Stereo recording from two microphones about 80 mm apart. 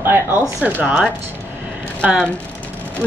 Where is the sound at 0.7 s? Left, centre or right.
Centre.